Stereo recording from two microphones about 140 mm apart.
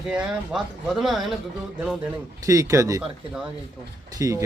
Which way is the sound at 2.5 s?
20° right (ahead or behind).